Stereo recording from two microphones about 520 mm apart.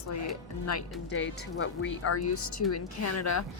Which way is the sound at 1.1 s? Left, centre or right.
Left.